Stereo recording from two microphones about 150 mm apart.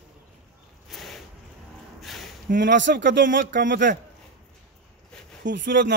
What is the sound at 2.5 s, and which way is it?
Speech, 70° right (ahead or behind).